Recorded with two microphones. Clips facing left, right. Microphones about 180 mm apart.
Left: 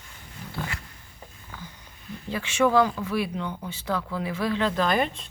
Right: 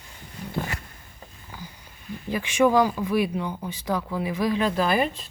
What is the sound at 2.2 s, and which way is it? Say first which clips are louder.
Speech: right 3 dB; 15° right (ahead or behind).